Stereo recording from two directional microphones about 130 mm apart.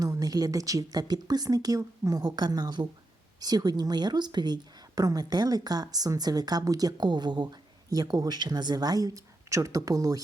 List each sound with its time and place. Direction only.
0.0 s a woman's voice: 25° right (ahead or behind)